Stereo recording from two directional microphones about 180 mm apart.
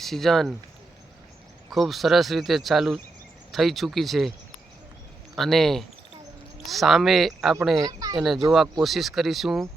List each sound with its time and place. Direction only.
0.0 s speech: centre (ahead or behind)
1.7 s speech: centre (ahead or behind)
5.4 s speech: centre (ahead or behind)
7.8 s a child's voice: 20° right (ahead or behind)
8.1 s speech: centre (ahead or behind)